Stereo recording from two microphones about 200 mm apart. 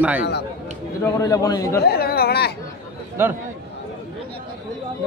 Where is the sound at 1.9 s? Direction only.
50° left (ahead or behind).